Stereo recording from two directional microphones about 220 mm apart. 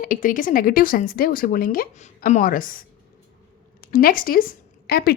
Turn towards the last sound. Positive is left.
turn(degrees=45)  # may be behind; listen again after turning